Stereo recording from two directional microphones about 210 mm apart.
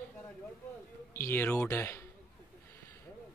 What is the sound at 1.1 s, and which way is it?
Speech, 10° left (ahead or behind).